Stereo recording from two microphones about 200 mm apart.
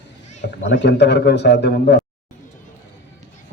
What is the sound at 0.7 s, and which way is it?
A man's voice, 60° left (ahead or behind).